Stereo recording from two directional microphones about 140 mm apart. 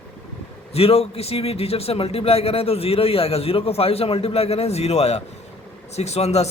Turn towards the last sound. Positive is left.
turn(degrees=50)  # may be behind; listen again after turning